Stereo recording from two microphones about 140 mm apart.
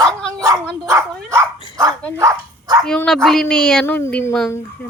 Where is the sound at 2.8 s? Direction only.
5° left (ahead or behind).